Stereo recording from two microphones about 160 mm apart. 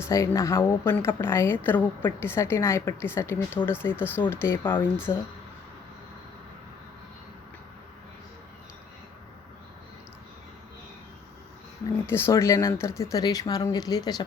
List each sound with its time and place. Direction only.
0.0 s a woman's voice: 20° left (ahead or behind)
12.0 s speech: 15° left (ahead or behind)